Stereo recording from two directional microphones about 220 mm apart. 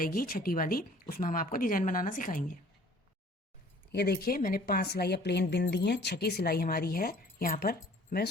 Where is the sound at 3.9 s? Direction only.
50° left (ahead or behind).